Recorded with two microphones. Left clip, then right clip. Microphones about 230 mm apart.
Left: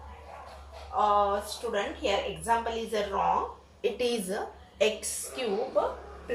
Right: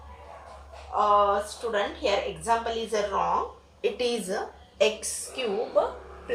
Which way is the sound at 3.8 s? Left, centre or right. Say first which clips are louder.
Right 2 dB; centre.